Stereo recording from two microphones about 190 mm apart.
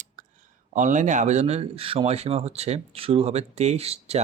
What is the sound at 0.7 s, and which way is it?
Speech, 40° right (ahead or behind).